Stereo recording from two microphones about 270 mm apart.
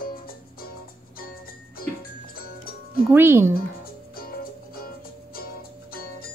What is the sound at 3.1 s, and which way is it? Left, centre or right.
Speech, centre.